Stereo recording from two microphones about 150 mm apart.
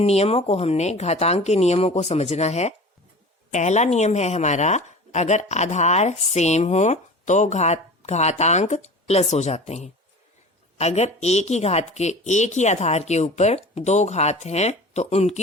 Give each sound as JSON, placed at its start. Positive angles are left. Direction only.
{"t": 0.0, "sound": "speech", "side_deg": 45}